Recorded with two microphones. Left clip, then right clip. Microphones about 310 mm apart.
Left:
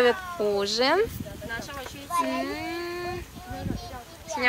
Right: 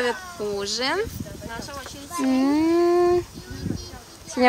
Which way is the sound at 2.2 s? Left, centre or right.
Centre.